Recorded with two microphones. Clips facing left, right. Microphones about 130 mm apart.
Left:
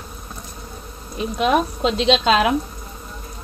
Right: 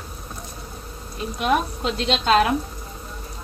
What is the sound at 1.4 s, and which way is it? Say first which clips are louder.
A woman's voice: left 3 dB; 90° left.